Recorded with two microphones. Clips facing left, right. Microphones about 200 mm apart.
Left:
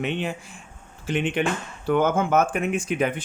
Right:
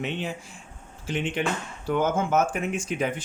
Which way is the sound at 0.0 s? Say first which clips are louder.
Left 3 dB; 60° left (ahead or behind).